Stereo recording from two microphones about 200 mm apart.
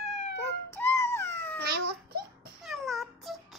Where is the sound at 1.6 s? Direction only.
50° right (ahead or behind).